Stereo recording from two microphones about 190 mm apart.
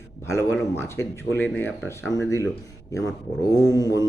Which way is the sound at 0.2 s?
15° left (ahead or behind).